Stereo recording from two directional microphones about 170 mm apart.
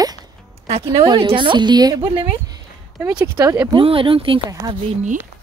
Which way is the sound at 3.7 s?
30° right (ahead or behind).